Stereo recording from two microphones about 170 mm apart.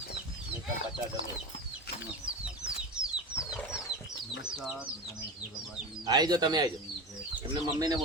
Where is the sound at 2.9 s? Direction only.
5° right (ahead or behind).